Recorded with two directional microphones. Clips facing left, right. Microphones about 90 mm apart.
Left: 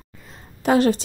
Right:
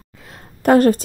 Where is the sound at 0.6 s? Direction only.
45° right (ahead or behind).